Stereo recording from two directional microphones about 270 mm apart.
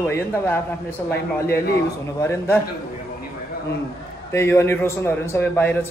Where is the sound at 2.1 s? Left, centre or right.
Centre.